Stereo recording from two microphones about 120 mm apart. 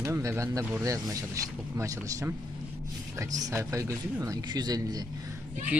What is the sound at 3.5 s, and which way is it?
Speech, 25° right (ahead or behind).